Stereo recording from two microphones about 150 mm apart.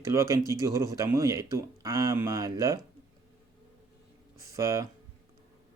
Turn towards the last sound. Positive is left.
turn(degrees=-20)  # may be behind; listen again after turning